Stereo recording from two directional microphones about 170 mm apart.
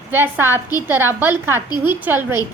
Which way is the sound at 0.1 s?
10° right (ahead or behind).